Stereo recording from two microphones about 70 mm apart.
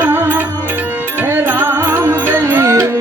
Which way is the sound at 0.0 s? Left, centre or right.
Right.